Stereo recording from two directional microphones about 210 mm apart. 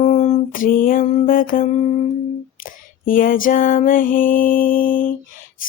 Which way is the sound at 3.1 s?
40° left (ahead or behind).